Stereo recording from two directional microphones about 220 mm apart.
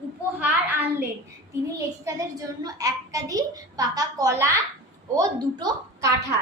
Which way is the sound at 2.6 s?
15° right (ahead or behind).